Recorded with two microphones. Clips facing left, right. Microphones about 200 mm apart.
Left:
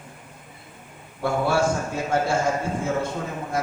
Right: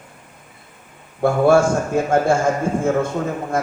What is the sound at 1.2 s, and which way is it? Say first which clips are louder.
A man's voice: right 8 dB; 50° right (ahead or behind).